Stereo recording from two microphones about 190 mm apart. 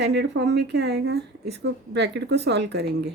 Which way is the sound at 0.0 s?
65° right (ahead or behind).